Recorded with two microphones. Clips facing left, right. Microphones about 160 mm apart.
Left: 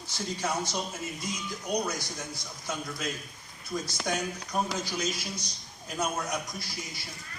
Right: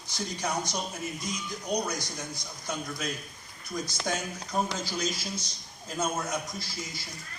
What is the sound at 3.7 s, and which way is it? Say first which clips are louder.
Speech: left 1 dB; centre (ahead or behind).